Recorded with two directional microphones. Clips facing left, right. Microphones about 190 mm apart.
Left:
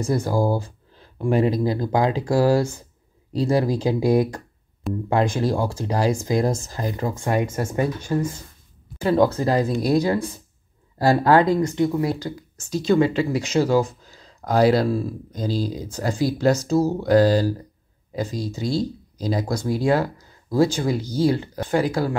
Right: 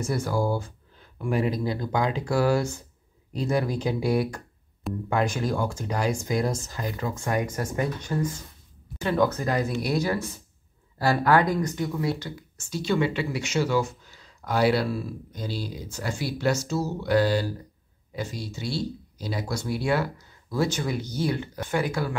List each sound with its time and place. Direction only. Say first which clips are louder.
0.0 s speech: left 5 dB; 35° left (ahead or behind)
4.9 s speech: left 5 dB; centre (ahead or behind)
5.3 s speech: left 5 dB; 35° left (ahead or behind)
11.5 s speech: left 7 dB; 25° left (ahead or behind)
12.1 s speech: left 3 dB; 40° left (ahead or behind)